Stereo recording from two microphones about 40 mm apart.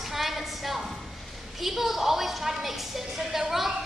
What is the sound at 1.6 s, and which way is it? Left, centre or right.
A woman's voice, centre.